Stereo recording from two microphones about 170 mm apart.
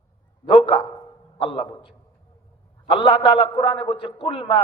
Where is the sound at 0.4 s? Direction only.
30° left (ahead or behind).